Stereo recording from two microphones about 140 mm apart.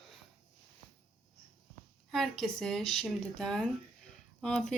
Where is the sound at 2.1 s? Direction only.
Centre (ahead or behind).